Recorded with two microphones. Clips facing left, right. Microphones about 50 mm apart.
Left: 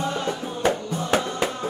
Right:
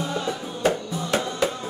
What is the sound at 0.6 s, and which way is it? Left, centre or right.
Music, left.